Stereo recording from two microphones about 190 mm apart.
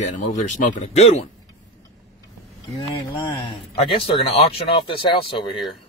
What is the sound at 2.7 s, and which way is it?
Speech, 25° left (ahead or behind).